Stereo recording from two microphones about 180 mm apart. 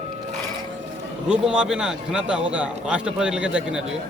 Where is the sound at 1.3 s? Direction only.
5° right (ahead or behind).